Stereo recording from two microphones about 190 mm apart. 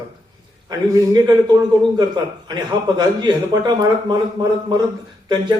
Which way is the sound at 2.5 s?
25° right (ahead or behind).